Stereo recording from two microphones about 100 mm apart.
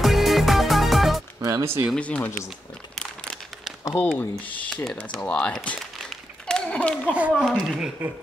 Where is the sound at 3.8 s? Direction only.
30° left (ahead or behind).